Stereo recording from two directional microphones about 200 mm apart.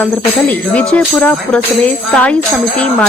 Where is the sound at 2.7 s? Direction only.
5° left (ahead or behind).